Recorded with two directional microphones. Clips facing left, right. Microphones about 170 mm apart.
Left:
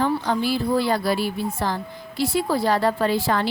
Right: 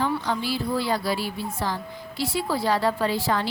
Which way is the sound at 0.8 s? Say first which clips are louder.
Left 4 dB; 55° left (ahead or behind).